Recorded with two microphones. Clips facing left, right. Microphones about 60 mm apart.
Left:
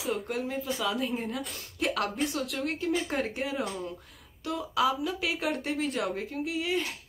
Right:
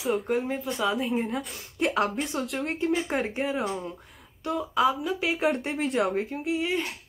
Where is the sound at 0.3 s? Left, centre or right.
Centre.